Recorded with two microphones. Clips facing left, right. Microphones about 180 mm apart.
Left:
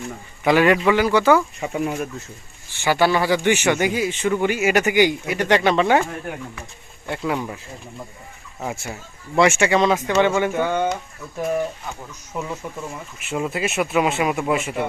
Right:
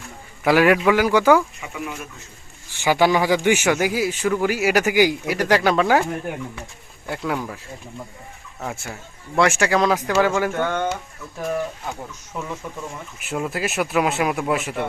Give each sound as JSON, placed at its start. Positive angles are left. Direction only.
{"t": 0.4, "sound": "speech", "side_deg": -5}
{"t": 1.6, "sound": "speech", "side_deg": 40}
{"t": 2.7, "sound": "speech", "side_deg": -15}
{"t": 7.1, "sound": "speech", "side_deg": 0}
{"t": 8.6, "sound": "speech", "side_deg": 5}
{"t": 12.3, "sound": "speech", "side_deg": 10}
{"t": 13.1, "sound": "speech", "side_deg": 0}